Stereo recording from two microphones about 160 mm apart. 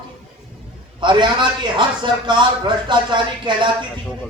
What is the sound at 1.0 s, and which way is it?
A man's voice, 30° right (ahead or behind).